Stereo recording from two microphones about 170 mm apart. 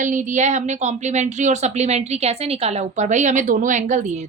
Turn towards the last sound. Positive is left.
turn(degrees=-45)  # may be behind; listen again after turning